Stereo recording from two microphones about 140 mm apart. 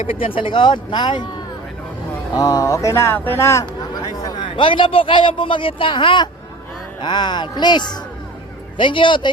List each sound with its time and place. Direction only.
0.0 s a man's voice: 40° left (ahead or behind)
2.3 s a man's voice: 30° left (ahead or behind)